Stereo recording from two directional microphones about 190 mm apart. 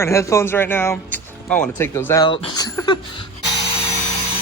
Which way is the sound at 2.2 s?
25° left (ahead or behind).